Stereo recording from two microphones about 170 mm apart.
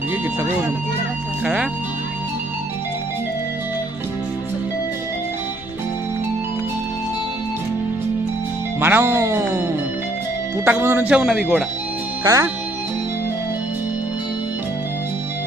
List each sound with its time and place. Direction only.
8.8 s speech: 10° right (ahead or behind)
10.7 s speech: 10° right (ahead or behind)
12.2 s speech: 20° right (ahead or behind)